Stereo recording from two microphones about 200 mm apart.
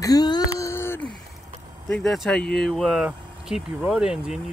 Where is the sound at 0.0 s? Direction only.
20° left (ahead or behind).